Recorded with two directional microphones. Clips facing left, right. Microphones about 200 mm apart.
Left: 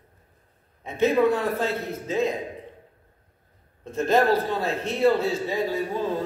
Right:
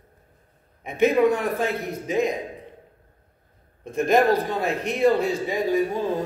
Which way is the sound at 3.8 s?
15° right (ahead or behind).